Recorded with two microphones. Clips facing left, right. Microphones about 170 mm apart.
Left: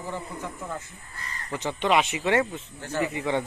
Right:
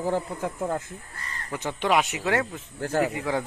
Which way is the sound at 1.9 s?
Centre (ahead or behind).